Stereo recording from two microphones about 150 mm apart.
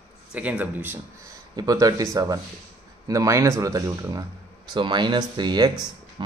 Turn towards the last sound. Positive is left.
turn(degrees=-30)  # may be behind; listen again after turning